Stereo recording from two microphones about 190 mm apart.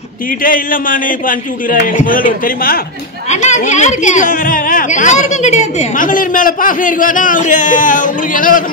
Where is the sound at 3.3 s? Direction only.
35° left (ahead or behind).